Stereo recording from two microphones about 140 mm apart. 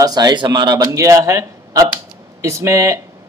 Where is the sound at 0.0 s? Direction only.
30° right (ahead or behind).